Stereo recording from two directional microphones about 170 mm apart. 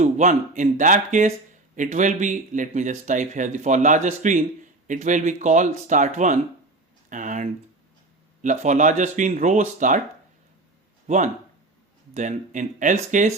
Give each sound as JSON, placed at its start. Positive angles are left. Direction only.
{"t": 0.0, "sound": "speech", "side_deg": -45}
{"t": 11.0, "sound": "a sound", "side_deg": -45}
{"t": 12.1, "sound": "speech", "side_deg": -45}